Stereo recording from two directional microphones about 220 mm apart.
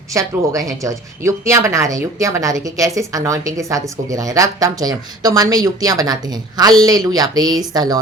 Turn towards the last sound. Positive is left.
turn(degrees=-15)  # may be behind; listen again after turning